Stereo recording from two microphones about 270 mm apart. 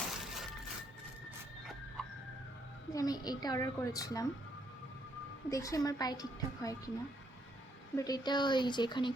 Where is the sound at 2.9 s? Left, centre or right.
Centre.